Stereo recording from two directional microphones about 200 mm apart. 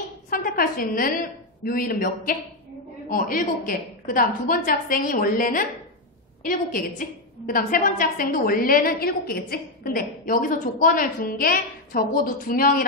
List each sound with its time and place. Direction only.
0.3 s a woman's voice: 45° left (ahead or behind)